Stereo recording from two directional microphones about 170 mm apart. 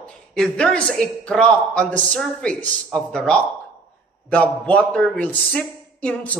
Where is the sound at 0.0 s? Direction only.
5° left (ahead or behind).